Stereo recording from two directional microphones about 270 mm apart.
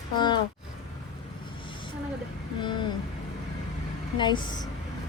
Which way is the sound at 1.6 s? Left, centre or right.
Centre.